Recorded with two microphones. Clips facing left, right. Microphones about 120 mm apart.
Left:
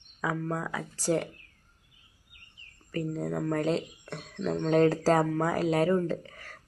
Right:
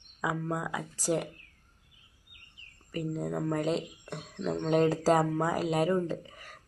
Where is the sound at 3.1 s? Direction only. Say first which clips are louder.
Left 1 dB; 15° right (ahead or behind).